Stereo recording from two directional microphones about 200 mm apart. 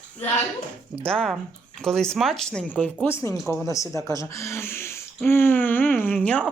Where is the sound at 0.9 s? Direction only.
30° right (ahead or behind).